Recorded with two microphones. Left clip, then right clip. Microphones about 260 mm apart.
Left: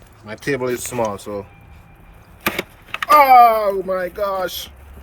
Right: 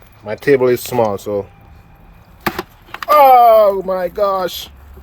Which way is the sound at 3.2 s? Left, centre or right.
Right.